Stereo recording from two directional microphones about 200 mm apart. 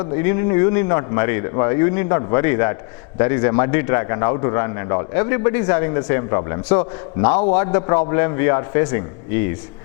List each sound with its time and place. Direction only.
0.0 s a man's voice: 15° left (ahead or behind)